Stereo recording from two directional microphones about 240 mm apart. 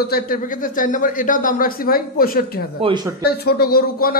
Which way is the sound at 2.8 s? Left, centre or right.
Centre.